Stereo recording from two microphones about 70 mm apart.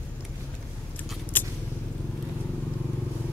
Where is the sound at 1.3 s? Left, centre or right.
Left.